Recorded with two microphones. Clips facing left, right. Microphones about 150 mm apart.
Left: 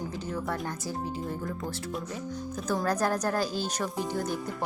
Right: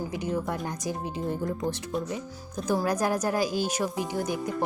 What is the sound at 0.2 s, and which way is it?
Speech, 20° right (ahead or behind).